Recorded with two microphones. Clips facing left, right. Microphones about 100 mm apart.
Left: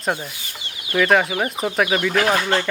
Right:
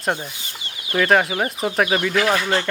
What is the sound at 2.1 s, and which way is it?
Speech, 45° left (ahead or behind).